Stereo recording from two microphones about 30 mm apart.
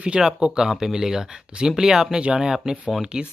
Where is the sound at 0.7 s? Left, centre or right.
Centre.